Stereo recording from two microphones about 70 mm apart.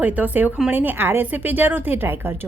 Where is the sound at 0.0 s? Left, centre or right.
Right.